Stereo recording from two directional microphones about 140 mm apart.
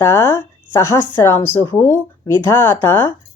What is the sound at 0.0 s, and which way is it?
Speech, 15° left (ahead or behind).